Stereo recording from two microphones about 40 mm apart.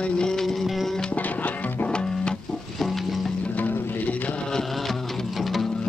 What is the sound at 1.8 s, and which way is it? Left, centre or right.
Music, left.